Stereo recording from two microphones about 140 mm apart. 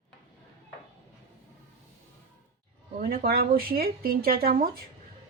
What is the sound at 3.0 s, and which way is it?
Speech, 90° right.